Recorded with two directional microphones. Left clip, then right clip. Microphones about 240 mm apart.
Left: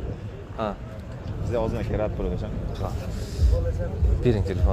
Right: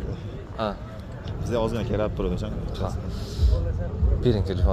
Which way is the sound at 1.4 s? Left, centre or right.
Right.